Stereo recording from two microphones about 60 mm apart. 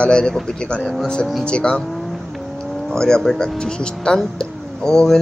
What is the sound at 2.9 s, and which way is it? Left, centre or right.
Speech, centre.